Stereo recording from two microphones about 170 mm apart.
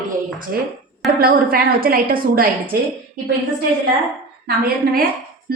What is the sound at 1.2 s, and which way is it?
A woman's voice, 60° right (ahead or behind).